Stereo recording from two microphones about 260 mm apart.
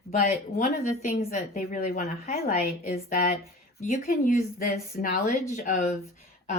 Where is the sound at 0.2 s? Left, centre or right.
Left.